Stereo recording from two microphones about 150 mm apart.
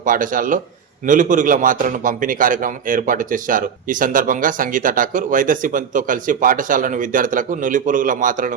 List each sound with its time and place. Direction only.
0.0 s a man's voice: 65° right (ahead or behind)